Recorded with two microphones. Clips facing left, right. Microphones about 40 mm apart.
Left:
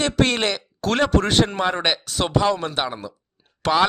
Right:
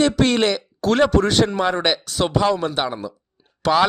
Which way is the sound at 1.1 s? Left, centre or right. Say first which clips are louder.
Right 2 dB; left.